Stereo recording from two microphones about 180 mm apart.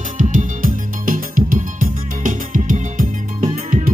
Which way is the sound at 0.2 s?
45° right (ahead or behind).